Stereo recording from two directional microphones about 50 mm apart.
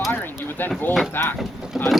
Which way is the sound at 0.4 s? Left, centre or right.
Left.